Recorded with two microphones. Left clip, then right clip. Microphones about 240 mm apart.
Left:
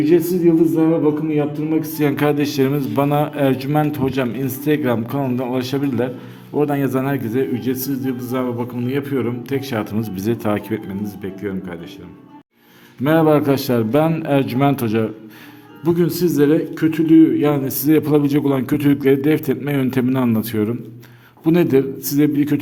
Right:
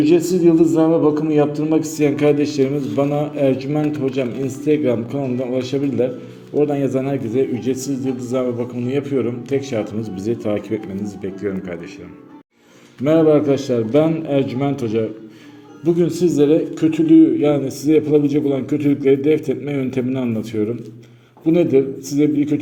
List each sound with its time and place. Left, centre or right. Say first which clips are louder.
0.0 s speech: even; centre
1.4 s a man's voice: right 3 dB; centre
13.1 s a man's voice: right 1 dB; left